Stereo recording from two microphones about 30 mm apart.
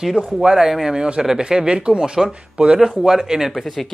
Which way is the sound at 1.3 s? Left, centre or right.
Right.